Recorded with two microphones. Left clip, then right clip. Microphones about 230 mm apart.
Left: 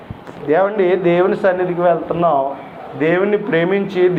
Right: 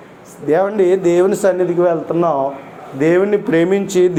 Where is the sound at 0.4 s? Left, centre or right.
Right.